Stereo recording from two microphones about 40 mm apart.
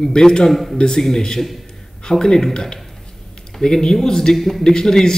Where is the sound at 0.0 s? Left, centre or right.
Centre.